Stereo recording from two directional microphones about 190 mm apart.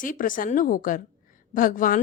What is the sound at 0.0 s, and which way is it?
A woman's voice, 45° left (ahead or behind).